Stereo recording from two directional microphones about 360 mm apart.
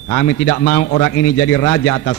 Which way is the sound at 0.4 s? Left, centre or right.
Left.